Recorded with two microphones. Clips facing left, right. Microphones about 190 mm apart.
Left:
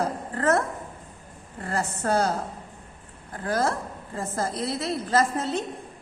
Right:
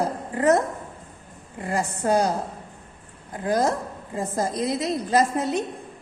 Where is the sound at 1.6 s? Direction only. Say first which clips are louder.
Right 3 dB; 15° right (ahead or behind).